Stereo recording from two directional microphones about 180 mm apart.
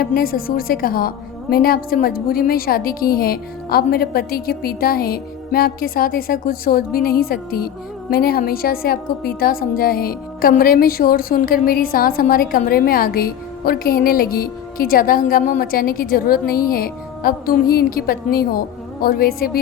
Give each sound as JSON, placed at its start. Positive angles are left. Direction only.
{"t": 0.0, "sound": "a woman's voice", "side_deg": 55}